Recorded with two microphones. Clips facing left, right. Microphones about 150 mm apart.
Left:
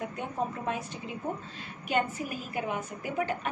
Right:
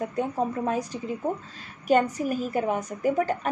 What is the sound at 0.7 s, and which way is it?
A woman's voice, 40° right (ahead or behind).